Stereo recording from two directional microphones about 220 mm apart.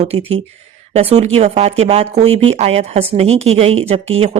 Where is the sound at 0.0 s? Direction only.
30° right (ahead or behind).